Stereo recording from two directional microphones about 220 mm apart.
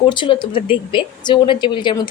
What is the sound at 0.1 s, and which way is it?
A woman's voice, 20° left (ahead or behind).